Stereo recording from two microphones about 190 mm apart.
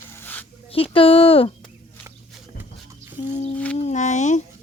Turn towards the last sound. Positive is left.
turn(degrees=40)  # may be behind; listen again after turning